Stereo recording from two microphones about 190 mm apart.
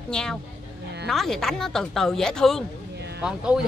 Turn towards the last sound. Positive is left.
turn(degrees=-5)  # may be behind; listen again after turning